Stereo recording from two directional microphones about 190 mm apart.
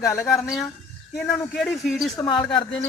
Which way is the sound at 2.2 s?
25° left (ahead or behind).